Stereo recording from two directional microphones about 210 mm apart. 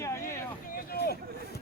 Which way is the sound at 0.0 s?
15° left (ahead or behind).